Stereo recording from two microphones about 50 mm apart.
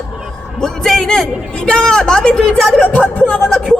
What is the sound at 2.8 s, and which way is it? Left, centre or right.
Music, left.